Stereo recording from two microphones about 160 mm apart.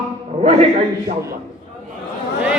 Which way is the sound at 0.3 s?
40° right (ahead or behind).